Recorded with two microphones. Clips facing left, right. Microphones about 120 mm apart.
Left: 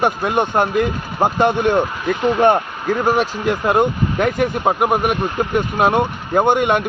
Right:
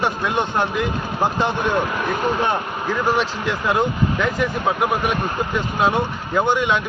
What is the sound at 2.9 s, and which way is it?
Speech, 45° left (ahead or behind).